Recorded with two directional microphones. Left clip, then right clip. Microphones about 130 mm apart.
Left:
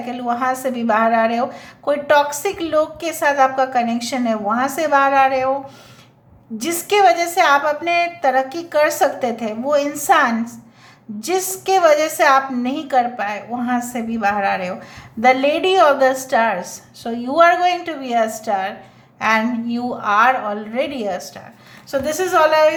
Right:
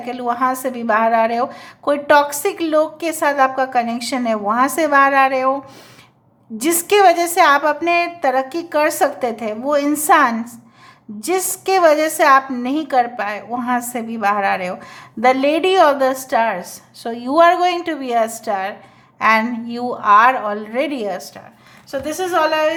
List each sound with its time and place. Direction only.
0.0 s a woman's voice: 35° right (ahead or behind)
6.6 s a woman's voice: 40° right (ahead or behind)
21.9 s a woman's voice: 15° right (ahead or behind)